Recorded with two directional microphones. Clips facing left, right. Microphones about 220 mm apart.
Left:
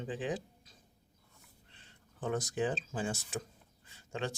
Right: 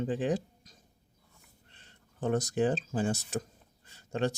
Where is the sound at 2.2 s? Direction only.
40° right (ahead or behind).